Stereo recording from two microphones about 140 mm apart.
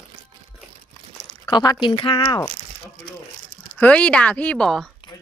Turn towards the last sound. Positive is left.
turn(degrees=5)  # may be behind; listen again after turning